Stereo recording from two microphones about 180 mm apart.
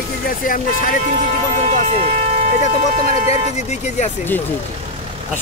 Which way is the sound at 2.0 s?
35° right (ahead or behind).